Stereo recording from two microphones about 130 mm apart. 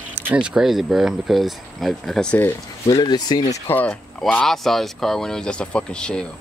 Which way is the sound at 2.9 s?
30° left (ahead or behind).